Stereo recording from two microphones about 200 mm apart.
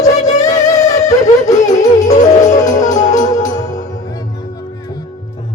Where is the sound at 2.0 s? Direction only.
35° left (ahead or behind).